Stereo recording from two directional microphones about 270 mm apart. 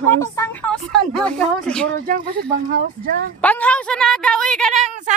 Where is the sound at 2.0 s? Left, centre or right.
Right.